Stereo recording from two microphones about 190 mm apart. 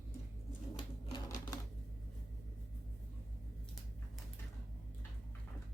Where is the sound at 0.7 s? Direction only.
20° left (ahead or behind).